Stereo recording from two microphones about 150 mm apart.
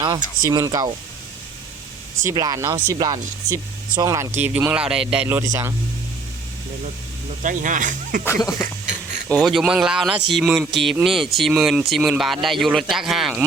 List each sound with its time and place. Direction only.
0.4 s speech: 25° right (ahead or behind)
2.2 s speech: 25° right (ahead or behind)
4.4 s speech: 10° right (ahead or behind)
5.4 s speech: 20° right (ahead or behind)
7.4 s speech: 60° right (ahead or behind)
8.4 s speech: 20° left (ahead or behind)
8.6 s a sound: 55° right (ahead or behind)
9.4 s speech: centre (ahead or behind)